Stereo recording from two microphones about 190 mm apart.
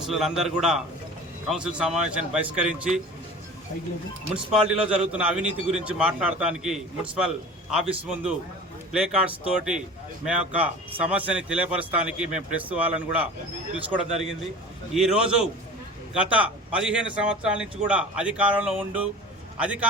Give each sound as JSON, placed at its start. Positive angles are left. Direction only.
{"t": 0.0, "sound": "a man's voice", "side_deg": 0}
{"t": 4.5, "sound": "a man's voice", "side_deg": -5}